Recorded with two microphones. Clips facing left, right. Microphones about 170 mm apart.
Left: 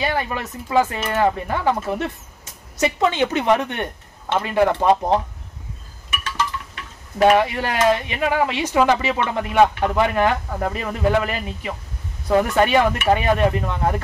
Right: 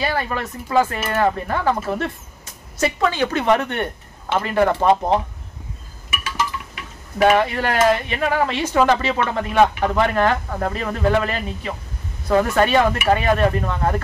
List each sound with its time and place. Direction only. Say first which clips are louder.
0.0 s speech: even; 15° left (ahead or behind)
2.8 s speech: left 1 dB; 20° left (ahead or behind)
6.0 s chink: even; 10° right (ahead or behind)
7.3 s speech: right 1 dB; 15° left (ahead or behind)